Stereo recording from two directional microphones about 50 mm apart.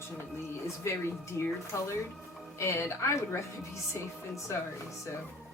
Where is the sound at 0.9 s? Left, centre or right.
Left.